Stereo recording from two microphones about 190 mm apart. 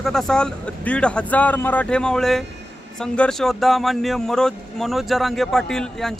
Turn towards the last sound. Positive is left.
turn(degrees=0)  # may be behind; listen again after turning